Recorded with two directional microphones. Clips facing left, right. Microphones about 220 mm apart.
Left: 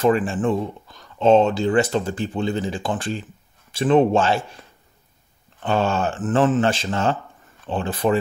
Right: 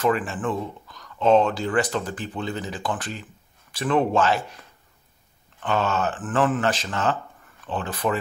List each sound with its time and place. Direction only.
0.0 s speech: 30° left (ahead or behind)
5.6 s speech: 30° left (ahead or behind)